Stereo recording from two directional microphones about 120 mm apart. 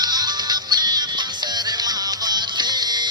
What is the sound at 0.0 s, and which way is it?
Music, 35° right (ahead or behind).